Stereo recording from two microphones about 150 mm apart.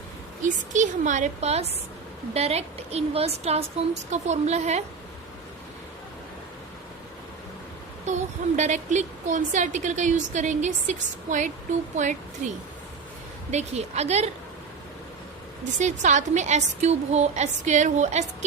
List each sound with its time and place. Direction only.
0.4 s a woman's voice: 55° right (ahead or behind)
8.0 s a woman's voice: 50° right (ahead or behind)
15.8 s a woman's voice: 55° right (ahead or behind)